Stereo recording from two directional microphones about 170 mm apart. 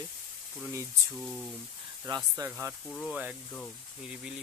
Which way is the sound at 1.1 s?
Centre (ahead or behind).